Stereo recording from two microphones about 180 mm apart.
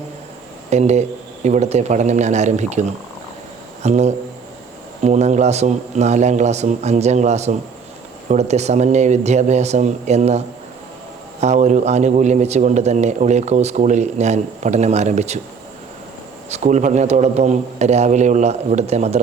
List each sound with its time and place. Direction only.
0.7 s a man's voice: 40° right (ahead or behind)
16.5 s a man's voice: 40° right (ahead or behind)